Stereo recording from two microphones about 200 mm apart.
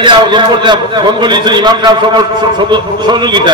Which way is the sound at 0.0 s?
25° right (ahead or behind).